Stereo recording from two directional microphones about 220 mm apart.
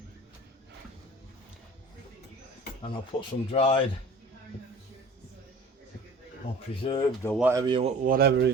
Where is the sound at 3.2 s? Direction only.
25° left (ahead or behind).